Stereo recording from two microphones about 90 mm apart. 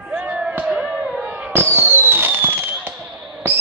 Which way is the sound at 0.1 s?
15° right (ahead or behind).